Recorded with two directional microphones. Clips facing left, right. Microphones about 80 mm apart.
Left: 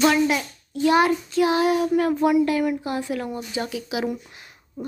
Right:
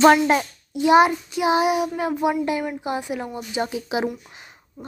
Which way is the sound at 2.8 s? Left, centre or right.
Centre.